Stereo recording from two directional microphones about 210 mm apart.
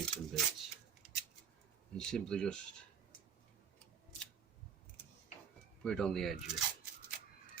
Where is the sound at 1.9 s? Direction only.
5° left (ahead or behind).